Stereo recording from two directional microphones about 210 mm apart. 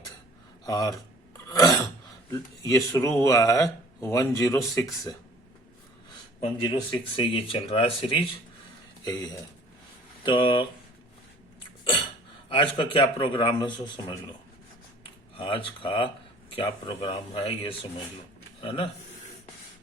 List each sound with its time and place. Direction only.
0.6 s speech: 15° left (ahead or behind)
1.5 s a sound: 15° left (ahead or behind)
2.3 s speech: 15° left (ahead or behind)
6.4 s speech: 25° left (ahead or behind)
12.5 s speech: 25° left (ahead or behind)
15.0 s speech: 25° left (ahead or behind)